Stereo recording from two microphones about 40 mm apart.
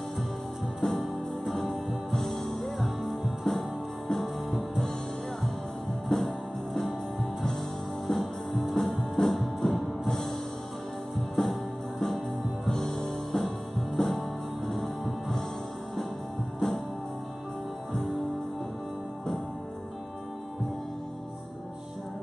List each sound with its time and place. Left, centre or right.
0.7 s music: centre
3.4 s music: centre
4.1 s music: centre
6.0 s music: centre
8.1 s music: centre
11.4 s music: centre
12.6 s music: centre
14.7 s music: centre
16.5 s music: centre